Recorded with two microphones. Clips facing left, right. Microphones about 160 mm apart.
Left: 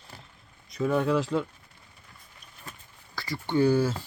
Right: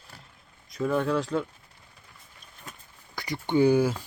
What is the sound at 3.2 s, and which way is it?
Speech, 20° right (ahead or behind).